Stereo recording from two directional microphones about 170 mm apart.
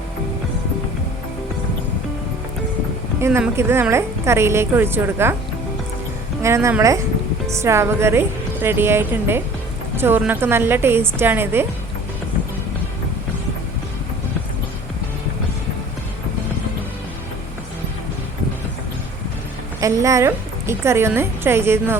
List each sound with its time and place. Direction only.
3.2 s a woman's voice: 15° right (ahead or behind)
6.4 s a woman's voice: 15° right (ahead or behind)
19.8 s a woman's voice: 20° right (ahead or behind)